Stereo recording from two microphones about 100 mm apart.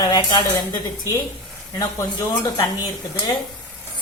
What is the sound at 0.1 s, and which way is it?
Speech, 45° left (ahead or behind).